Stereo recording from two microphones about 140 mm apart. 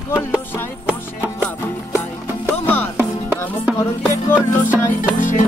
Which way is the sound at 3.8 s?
20° left (ahead or behind).